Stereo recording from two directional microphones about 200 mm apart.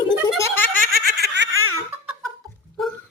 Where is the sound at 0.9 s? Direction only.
55° right (ahead or behind).